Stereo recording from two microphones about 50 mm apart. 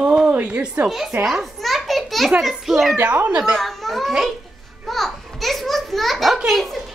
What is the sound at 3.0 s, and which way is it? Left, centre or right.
Speech, right.